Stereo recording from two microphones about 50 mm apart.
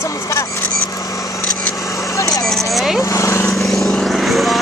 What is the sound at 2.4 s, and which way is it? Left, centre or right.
Speech, centre.